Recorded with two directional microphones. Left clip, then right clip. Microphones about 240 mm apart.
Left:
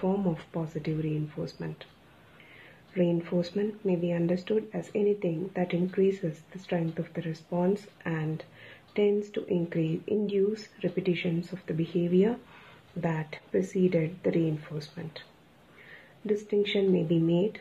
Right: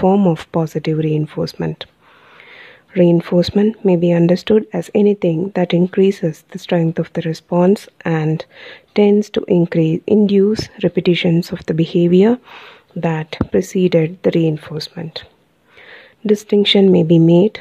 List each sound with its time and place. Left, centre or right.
0.0 s speech: right
2.9 s speech: right
16.3 s speech: right